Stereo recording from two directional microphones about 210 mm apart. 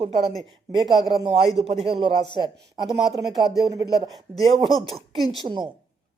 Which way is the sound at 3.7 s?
15° right (ahead or behind).